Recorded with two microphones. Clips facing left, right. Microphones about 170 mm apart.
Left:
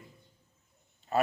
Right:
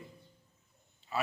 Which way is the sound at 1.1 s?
50° left (ahead or behind).